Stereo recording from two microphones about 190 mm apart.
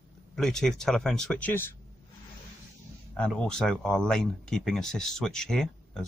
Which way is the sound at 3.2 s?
5° left (ahead or behind).